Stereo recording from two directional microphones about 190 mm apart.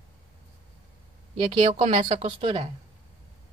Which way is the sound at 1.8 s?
35° right (ahead or behind).